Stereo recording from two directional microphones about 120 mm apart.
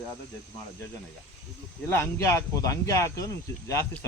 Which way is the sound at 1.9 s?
20° left (ahead or behind).